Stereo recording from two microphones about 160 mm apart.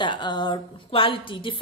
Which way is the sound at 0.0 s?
30° left (ahead or behind).